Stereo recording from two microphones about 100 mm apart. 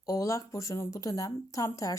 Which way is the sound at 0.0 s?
35° left (ahead or behind).